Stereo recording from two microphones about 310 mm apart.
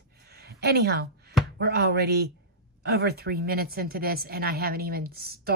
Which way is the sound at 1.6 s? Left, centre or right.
Right.